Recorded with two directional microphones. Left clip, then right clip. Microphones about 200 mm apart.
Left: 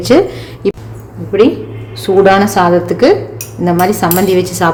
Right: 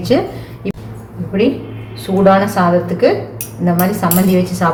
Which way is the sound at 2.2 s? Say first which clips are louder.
Even; 65° left (ahead or behind).